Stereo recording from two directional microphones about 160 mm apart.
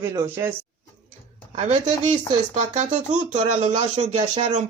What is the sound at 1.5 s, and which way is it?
Speech, 45° right (ahead or behind).